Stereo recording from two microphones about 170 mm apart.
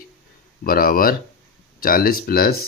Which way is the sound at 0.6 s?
55° left (ahead or behind).